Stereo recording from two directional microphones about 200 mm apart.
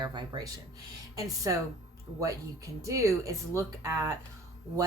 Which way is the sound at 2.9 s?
15° right (ahead or behind).